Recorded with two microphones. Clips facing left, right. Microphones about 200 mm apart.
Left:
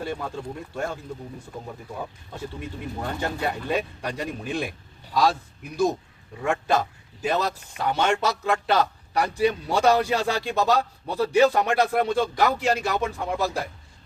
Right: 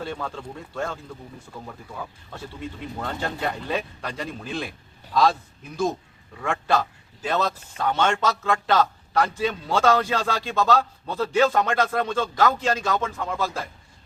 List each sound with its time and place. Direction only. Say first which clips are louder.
0.0 s a sound: left 1 dB; 15° left (ahead or behind)
2.3 s a man's voice: even; 15° left (ahead or behind)
5.7 s a man's voice: left 2 dB; 15° left (ahead or behind)